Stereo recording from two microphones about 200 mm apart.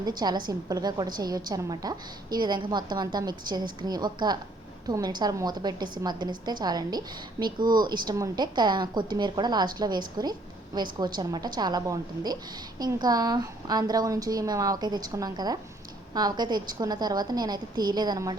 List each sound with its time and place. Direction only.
0.0 s a woman's voice: 20° right (ahead or behind)